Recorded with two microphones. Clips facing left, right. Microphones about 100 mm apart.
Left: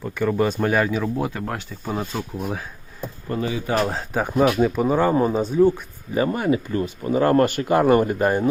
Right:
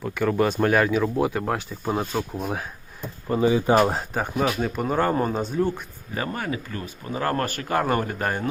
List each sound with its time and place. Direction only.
0.0 s speech: centre (ahead or behind)
3.2 s speech: 15° right (ahead or behind)
4.4 s speech: 20° left (ahead or behind)
4.6 s speech: 5° left (ahead or behind)
6.1 s speech: 20° left (ahead or behind)